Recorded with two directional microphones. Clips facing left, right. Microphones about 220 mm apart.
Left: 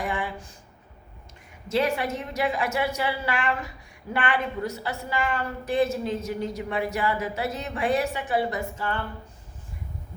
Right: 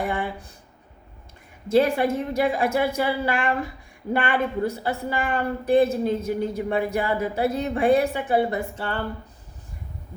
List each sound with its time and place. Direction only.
0.0 s a sound: 55° right (ahead or behind)
2.1 s a woman's voice: 55° right (ahead or behind)
8.8 s speech: 35° right (ahead or behind)